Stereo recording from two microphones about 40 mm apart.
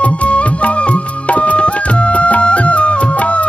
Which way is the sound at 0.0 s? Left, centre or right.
Left.